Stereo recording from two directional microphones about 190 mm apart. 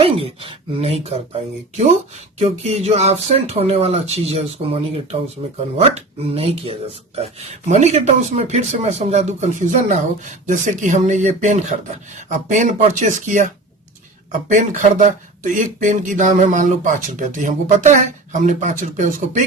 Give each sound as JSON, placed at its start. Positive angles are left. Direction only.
{"t": 0.0, "sound": "speech", "side_deg": -30}